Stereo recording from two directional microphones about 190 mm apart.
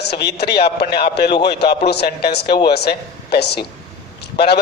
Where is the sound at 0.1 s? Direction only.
60° left (ahead or behind).